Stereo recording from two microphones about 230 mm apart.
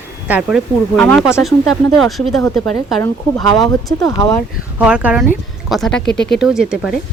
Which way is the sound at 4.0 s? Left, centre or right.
Centre.